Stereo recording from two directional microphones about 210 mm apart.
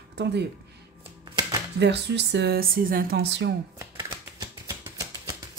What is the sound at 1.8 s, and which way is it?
A woman's voice, 55° right (ahead or behind).